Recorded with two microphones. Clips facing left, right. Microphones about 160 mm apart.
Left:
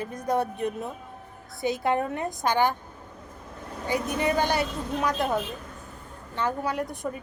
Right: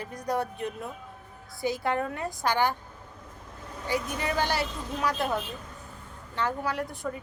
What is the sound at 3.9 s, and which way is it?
A woman's voice, 20° left (ahead or behind).